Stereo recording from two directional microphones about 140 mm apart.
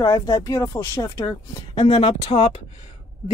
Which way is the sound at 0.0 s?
25° left (ahead or behind).